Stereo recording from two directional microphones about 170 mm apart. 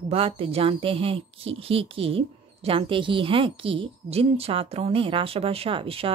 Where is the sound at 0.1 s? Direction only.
35° right (ahead or behind).